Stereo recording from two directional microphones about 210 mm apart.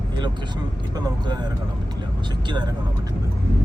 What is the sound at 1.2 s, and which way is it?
Speech, 20° right (ahead or behind).